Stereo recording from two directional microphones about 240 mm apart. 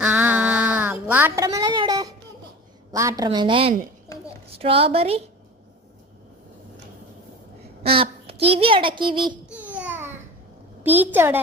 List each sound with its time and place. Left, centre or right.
0.0 s a sound: centre
2.9 s a child's voice: centre
4.1 s a sound: centre
4.5 s a child's voice: right
7.9 s a child's voice: right
9.5 s babbling: centre
10.8 s a woman's voice: centre